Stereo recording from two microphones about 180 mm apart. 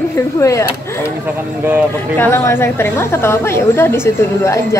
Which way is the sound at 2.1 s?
10° left (ahead or behind).